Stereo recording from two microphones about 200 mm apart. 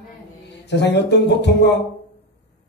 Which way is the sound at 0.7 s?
60° left (ahead or behind).